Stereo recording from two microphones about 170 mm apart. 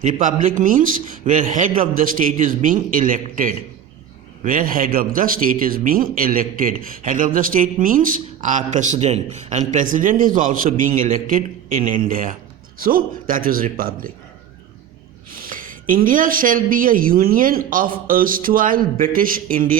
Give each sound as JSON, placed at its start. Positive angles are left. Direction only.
{"t": 0.0, "sound": "a man's voice", "side_deg": -50}
{"t": 15.3, "sound": "speech", "side_deg": -55}